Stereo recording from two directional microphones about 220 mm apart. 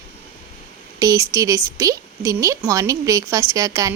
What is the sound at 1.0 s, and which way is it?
A woman's voice, 15° right (ahead or behind).